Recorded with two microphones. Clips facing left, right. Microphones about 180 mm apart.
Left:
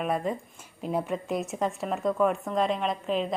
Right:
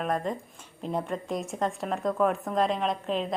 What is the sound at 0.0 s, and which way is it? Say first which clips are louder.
A woman's voice: left 1 dB; 5° left (ahead or behind).